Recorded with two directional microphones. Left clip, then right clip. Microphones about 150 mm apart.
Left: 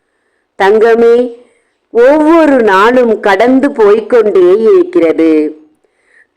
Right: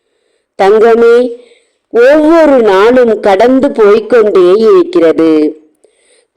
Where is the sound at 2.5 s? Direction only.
25° right (ahead or behind).